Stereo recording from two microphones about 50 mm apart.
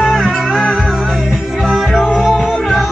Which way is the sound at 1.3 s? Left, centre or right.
Centre.